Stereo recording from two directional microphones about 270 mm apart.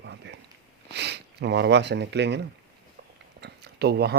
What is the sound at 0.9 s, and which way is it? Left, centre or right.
Speech, right.